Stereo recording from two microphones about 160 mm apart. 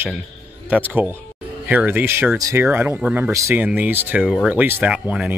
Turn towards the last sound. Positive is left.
turn(degrees=-5)  # may be behind; listen again after turning